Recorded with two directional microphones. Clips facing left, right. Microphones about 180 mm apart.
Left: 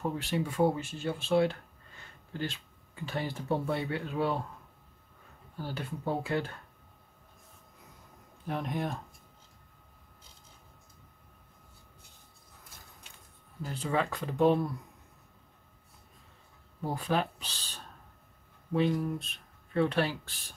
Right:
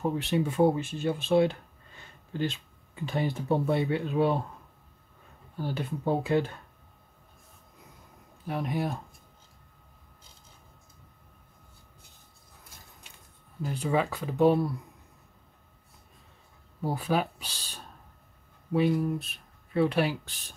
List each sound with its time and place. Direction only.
0.0 s speech: 20° right (ahead or behind)
3.1 s speech: 20° right (ahead or behind)
5.6 s speech: 20° right (ahead or behind)
8.5 s speech: 5° right (ahead or behind)
13.6 s speech: 15° right (ahead or behind)
16.8 s speech: 5° right (ahead or behind)